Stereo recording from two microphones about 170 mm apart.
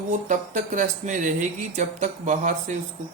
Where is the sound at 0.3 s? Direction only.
50° right (ahead or behind).